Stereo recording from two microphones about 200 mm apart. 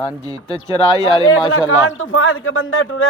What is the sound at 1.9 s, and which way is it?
Speech, 85° left.